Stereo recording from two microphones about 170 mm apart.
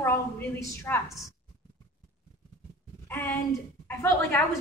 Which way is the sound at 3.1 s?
10° left (ahead or behind).